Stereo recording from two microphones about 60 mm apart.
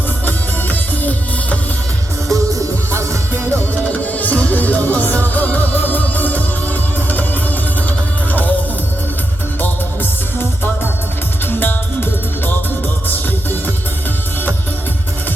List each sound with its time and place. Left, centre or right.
0.3 s music: left
2.3 s music: right
3.5 s music: left
8.3 s music: left
9.6 s music: left